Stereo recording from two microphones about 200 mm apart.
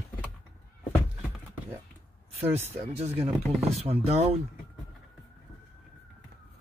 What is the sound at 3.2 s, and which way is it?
Speech, 30° right (ahead or behind).